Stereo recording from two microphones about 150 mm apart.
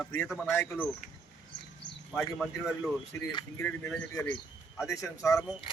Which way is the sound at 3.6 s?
15° left (ahead or behind).